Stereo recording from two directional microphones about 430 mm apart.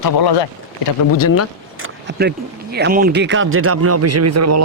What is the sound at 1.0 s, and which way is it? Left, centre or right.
Speech, left.